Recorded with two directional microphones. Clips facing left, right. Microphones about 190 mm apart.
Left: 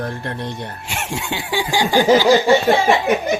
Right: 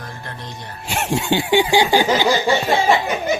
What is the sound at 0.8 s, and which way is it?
Speech, 35° right (ahead or behind).